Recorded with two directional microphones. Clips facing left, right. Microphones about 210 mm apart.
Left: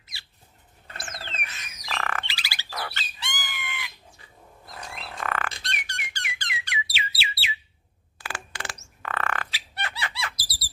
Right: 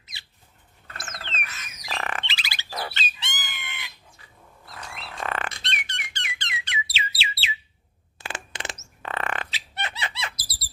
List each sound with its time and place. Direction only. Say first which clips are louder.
0.0 s rodents: right 1 dB; 20° right (ahead or behind)
1.9 s bird: even; 20° right (ahead or behind)
5.2 s squawk: right 1 dB; 25° right (ahead or behind)
5.6 s squeak: even; 25° right (ahead or behind)
8.2 s bird: right 1 dB; 20° right (ahead or behind)